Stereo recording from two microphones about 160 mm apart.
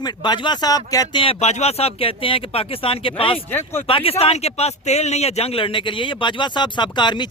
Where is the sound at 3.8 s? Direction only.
35° left (ahead or behind).